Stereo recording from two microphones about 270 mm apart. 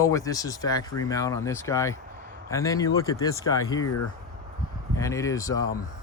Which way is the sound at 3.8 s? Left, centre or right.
Left.